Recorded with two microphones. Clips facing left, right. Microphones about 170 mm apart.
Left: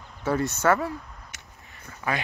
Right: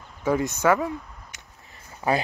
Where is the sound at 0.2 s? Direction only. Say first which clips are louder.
Right 2 dB; 15° right (ahead or behind).